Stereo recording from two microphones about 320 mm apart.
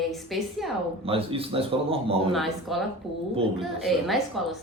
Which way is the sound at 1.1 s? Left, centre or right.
Centre.